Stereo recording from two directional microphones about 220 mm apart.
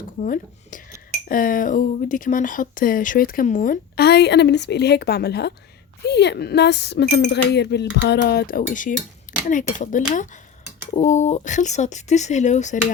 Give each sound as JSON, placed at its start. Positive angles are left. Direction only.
{"t": 0.2, "sound": "speech", "side_deg": 35}